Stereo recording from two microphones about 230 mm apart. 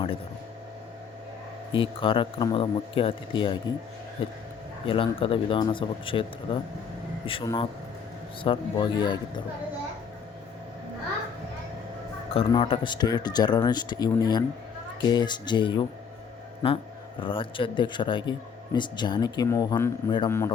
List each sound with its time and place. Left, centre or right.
1.7 s speech: left
4.9 s speech: left
12.3 s speech: left